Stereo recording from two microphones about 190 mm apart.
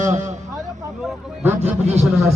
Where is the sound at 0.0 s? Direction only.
40° right (ahead or behind).